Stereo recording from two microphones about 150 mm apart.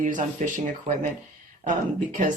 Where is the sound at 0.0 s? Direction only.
55° right (ahead or behind).